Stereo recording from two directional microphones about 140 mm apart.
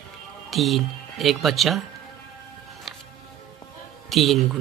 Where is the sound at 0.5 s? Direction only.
Centre (ahead or behind).